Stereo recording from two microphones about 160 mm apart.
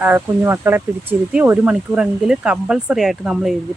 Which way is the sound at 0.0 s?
15° right (ahead or behind).